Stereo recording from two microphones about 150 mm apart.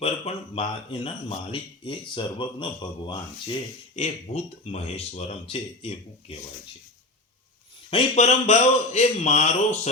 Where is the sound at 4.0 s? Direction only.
45° left (ahead or behind).